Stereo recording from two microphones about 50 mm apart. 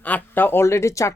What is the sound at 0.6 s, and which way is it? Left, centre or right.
Speech, left.